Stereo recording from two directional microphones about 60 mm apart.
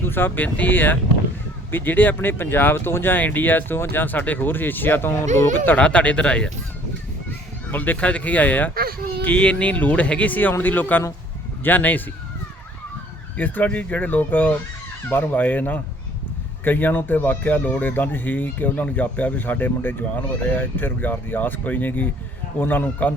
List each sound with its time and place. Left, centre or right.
0.0 s speech: left
5.7 s speech: centre
7.7 s speech: left
13.3 s speech: left